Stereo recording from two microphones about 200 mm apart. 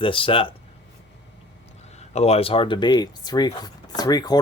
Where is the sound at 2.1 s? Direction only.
30° left (ahead or behind).